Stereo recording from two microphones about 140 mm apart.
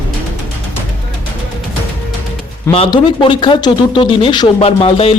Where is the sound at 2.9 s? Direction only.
35° left (ahead or behind).